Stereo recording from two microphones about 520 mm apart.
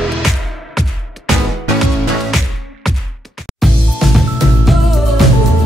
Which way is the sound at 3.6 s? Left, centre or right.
Centre.